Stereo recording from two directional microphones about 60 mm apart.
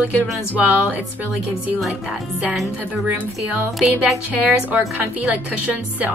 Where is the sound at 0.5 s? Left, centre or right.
Right.